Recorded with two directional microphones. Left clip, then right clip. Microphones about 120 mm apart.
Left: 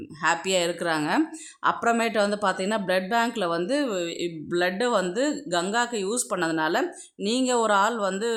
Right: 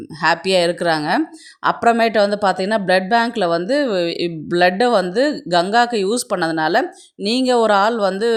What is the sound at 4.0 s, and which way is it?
Speech, 50° right (ahead or behind).